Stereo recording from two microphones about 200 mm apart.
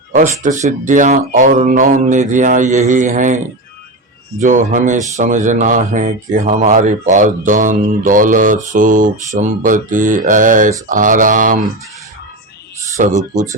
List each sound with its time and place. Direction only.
0.1 s speech: 35° right (ahead or behind)
13.0 s speech: 40° right (ahead or behind)